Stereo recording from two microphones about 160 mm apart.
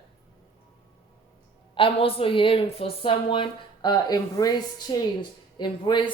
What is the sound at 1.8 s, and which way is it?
A woman's voice, 35° left (ahead or behind).